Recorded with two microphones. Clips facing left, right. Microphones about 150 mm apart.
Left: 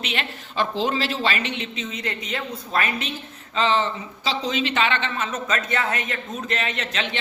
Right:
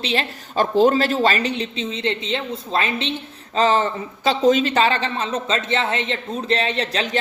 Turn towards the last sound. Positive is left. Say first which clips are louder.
# right 5 dB
turn(degrees=-35)  # may be behind; listen again after turning